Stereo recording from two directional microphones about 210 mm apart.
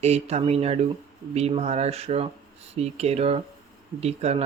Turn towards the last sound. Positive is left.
turn(degrees=-30)  # may be behind; listen again after turning